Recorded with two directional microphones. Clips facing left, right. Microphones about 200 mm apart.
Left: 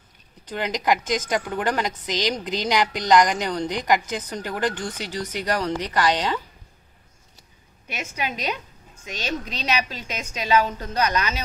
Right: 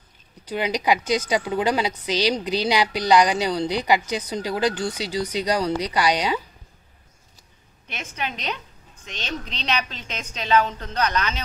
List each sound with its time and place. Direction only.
0.5 s a woman's voice: 10° right (ahead or behind)
7.9 s a woman's voice: 10° left (ahead or behind)